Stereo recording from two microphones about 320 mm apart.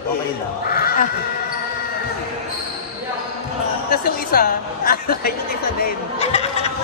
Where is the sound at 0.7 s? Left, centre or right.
Left.